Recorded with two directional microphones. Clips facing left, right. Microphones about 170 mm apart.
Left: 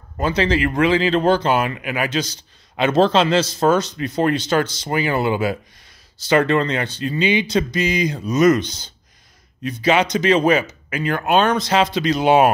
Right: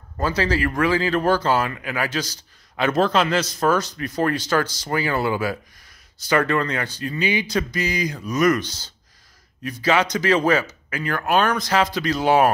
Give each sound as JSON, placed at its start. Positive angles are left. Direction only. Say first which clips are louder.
{"t": 0.2, "sound": "speech", "louder": "left 3 dB", "side_deg": 20}